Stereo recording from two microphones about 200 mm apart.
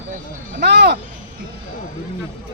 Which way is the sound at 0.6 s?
55° right (ahead or behind).